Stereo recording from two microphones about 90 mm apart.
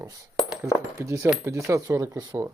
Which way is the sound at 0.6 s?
35° right (ahead or behind).